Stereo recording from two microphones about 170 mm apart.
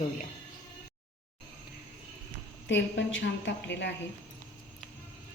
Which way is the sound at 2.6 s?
90° left.